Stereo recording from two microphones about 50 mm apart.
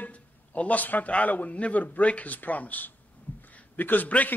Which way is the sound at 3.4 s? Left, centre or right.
Left.